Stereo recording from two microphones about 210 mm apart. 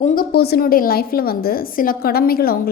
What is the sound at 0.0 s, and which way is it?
A woman's voice, 45° left (ahead or behind).